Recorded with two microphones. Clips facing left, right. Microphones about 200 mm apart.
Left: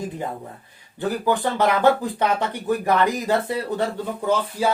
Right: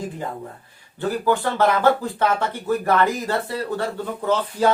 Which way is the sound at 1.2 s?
15° left (ahead or behind).